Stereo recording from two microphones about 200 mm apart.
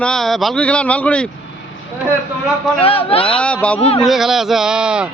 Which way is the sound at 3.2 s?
5° left (ahead or behind).